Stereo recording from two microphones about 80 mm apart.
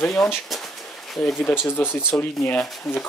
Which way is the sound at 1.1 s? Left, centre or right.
Centre.